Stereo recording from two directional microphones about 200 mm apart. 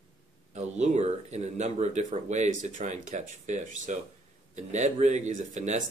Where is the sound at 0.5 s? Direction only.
35° right (ahead or behind).